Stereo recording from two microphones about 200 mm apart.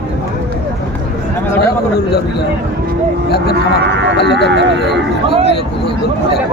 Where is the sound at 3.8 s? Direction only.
60° right (ahead or behind).